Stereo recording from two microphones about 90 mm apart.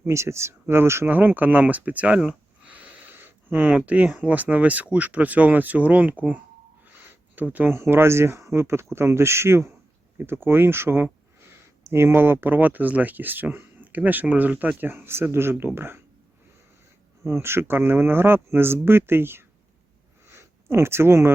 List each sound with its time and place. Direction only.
0.1 s speech: 30° right (ahead or behind)
17.2 s speech: 25° right (ahead or behind)
20.2 s a sound: 30° right (ahead or behind)